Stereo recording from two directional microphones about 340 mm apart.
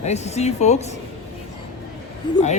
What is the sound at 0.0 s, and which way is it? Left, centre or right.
Speech, centre.